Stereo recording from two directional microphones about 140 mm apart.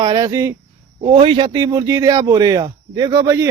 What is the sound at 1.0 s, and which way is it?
A man's voice, 40° right (ahead or behind).